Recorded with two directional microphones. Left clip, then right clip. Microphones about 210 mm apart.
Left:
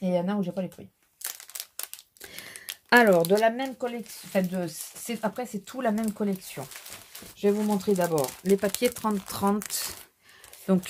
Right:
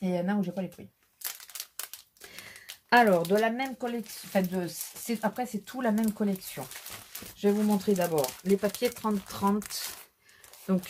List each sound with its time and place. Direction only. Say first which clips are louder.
0.0 s speech: left 3 dB; 35° left (ahead or behind)
2.2 s a sound: left 4 dB; 50° left (ahead or behind)
2.9 s speech: left 3 dB; 50° left (ahead or behind)
3.3 s speech: left 3 dB; 35° left (ahead or behind)